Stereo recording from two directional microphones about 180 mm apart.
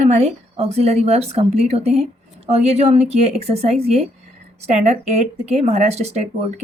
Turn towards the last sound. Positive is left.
turn(degrees=-40)  # may be behind; listen again after turning